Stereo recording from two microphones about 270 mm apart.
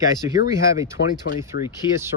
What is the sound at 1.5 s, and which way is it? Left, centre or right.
Speech, left.